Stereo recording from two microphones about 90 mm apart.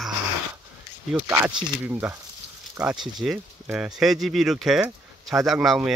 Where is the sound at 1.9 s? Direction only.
20° right (ahead or behind).